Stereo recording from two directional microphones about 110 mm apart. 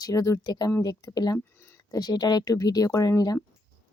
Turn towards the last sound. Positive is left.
turn(degrees=35)  # may be behind; listen again after turning